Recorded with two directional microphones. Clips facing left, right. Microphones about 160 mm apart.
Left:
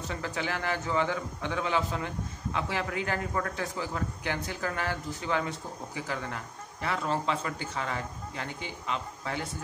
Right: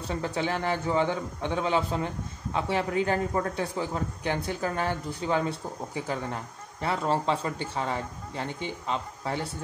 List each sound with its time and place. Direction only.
0.1 s a man's voice: 30° right (ahead or behind)